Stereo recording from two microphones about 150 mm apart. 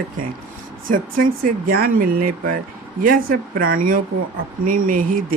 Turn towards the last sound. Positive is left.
turn(degrees=-65)  # may be behind; listen again after turning